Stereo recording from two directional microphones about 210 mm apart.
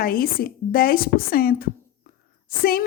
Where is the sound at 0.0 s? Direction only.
45° left (ahead or behind).